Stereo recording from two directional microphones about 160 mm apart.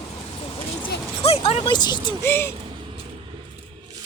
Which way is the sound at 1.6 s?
25° left (ahead or behind).